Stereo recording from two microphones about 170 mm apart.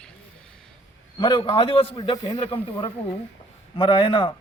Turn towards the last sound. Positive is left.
turn(degrees=30)  # may be behind; listen again after turning